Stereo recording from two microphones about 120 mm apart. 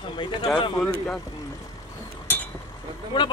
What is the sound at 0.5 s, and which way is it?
Speech, 40° left (ahead or behind).